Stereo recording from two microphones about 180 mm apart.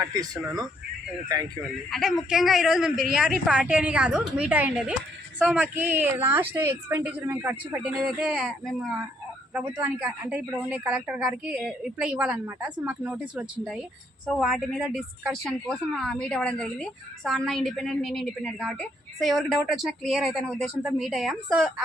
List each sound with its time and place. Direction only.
0.0 s speech: 20° right (ahead or behind)
1.9 s a woman's voice: centre (ahead or behind)